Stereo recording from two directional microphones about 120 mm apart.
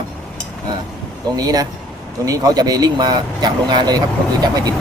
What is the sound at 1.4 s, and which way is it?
Speech, 30° right (ahead or behind).